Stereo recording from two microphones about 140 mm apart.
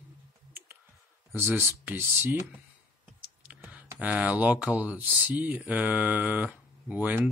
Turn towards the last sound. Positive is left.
turn(degrees=-10)  # may be behind; listen again after turning